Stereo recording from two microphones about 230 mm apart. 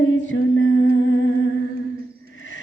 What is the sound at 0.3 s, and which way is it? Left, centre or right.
Humming, left.